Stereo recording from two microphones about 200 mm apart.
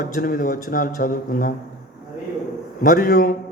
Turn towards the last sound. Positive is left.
turn(degrees=45)  # may be behind; listen again after turning